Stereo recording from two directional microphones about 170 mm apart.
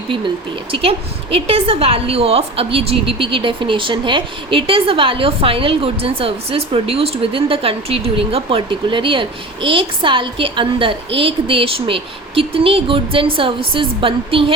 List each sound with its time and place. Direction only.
0.7 s a woman's voice: 35° right (ahead or behind)